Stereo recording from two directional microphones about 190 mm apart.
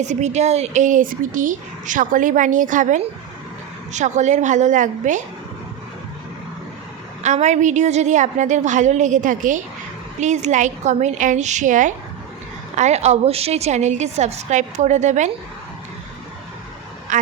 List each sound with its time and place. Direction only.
0.0 s speech: 40° right (ahead or behind)
7.2 s speech: 35° right (ahead or behind)
17.1 s speech: 40° right (ahead or behind)